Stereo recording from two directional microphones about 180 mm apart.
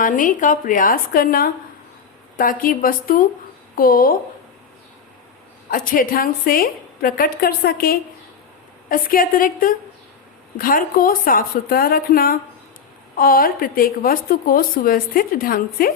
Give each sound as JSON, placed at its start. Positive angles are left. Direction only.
{"t": 0.0, "sound": "a woman's voice", "side_deg": 45}
{"t": 5.7, "sound": "a woman's voice", "side_deg": 50}